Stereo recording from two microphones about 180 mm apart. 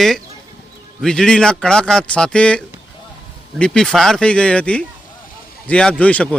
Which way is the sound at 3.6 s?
5° left (ahead or behind).